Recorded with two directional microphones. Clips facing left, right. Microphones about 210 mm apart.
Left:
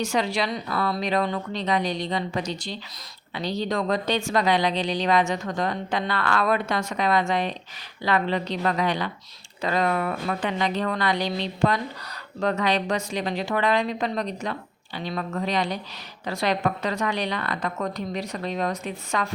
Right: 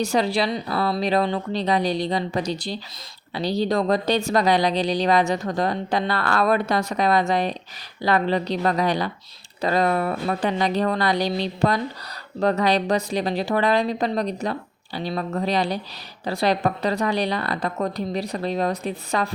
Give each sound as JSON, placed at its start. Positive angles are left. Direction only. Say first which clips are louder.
{"t": 0.0, "sound": "speech", "louder": "right 4 dB", "side_deg": -35}